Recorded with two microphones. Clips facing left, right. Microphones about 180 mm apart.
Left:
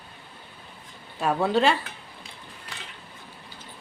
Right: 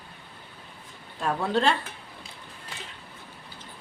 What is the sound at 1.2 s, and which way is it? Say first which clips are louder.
Speech: left 3 dB; 5° left (ahead or behind).